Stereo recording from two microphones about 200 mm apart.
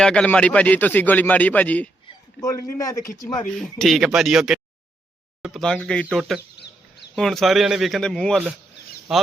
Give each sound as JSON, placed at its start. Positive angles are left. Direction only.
{"t": 0.0, "sound": "a man's voice", "side_deg": 5}
{"t": 3.8, "sound": "speech", "side_deg": 0}